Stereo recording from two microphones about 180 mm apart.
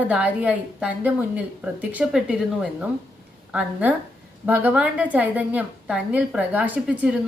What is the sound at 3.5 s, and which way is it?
A woman's voice, 5° right (ahead or behind).